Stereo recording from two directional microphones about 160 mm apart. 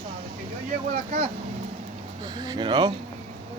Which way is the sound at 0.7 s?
45° right (ahead or behind).